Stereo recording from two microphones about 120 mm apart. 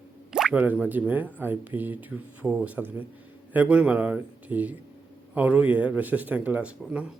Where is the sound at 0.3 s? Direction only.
5° right (ahead or behind).